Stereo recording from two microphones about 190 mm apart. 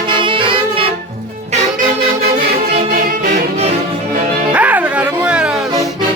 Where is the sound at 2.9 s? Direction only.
50° right (ahead or behind).